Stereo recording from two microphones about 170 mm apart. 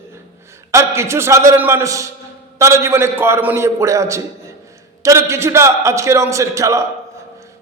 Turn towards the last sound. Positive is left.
turn(degrees=-20)  # may be behind; listen again after turning